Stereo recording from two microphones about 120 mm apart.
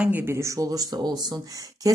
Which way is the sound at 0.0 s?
15° right (ahead or behind).